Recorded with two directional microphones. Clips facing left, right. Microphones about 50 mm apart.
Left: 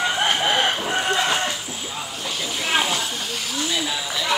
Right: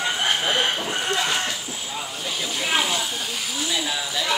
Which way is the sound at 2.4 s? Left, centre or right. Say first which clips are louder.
Left 1 dB; centre.